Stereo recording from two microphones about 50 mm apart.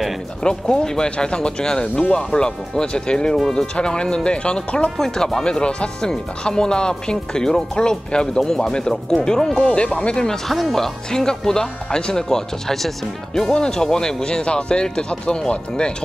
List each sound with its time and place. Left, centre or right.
0.4 s speech: centre
10.5 s speech: centre